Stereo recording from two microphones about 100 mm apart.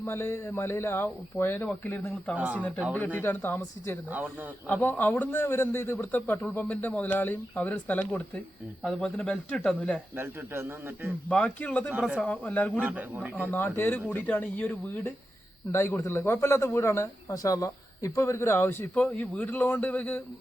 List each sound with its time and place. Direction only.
0.0 s speech: 25° left (ahead or behind)
2.3 s a man's voice: 15° right (ahead or behind)
2.6 s speech: 15° left (ahead or behind)
8.8 s speech: 5° left (ahead or behind)
10.2 s a man's voice: 25° right (ahead or behind)
11.3 s speech: 10° left (ahead or behind)
12.8 s a man's voice: 15° right (ahead or behind)
13.4 s speech: 20° left (ahead or behind)
15.7 s speech: 25° left (ahead or behind)